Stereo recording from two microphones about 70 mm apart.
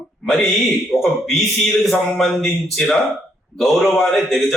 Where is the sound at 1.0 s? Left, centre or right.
Centre.